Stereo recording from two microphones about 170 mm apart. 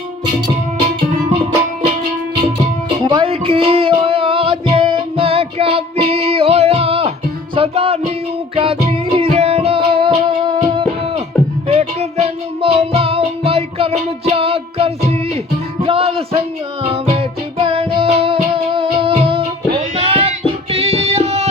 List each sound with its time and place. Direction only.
3.0 s music: 25° right (ahead or behind)